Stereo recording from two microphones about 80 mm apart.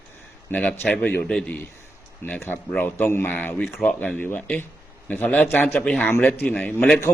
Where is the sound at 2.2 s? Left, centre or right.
Left; by 7.0 s centre.